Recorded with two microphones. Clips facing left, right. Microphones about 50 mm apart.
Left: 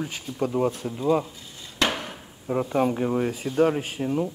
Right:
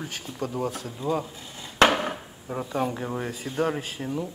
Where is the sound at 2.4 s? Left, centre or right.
Centre.